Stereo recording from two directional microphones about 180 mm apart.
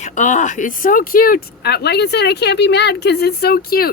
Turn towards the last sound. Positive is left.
turn(degrees=55)  # may be behind; listen again after turning